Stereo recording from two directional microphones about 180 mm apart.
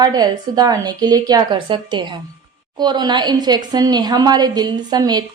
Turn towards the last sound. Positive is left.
turn(degrees=-20)  # may be behind; listen again after turning